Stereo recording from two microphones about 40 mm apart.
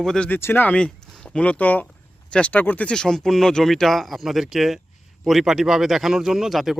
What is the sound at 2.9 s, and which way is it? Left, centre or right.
Speech, centre.